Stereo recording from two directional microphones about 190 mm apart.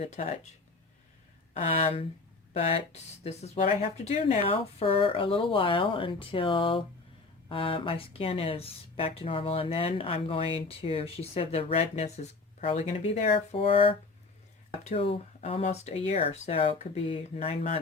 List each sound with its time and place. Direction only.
0.0 s speech: 35° left (ahead or behind)
1.6 s speech: 30° left (ahead or behind)